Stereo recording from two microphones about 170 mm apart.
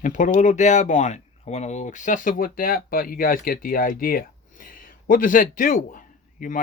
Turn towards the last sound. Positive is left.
turn(degrees=50)  # may be behind; listen again after turning